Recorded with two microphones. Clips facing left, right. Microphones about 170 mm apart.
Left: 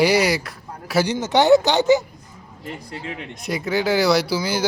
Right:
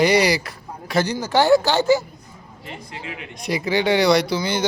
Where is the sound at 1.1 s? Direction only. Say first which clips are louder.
Left 2 dB; 20° left (ahead or behind).